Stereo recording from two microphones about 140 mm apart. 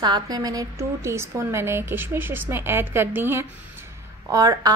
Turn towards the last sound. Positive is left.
turn(degrees=-25)  # may be behind; listen again after turning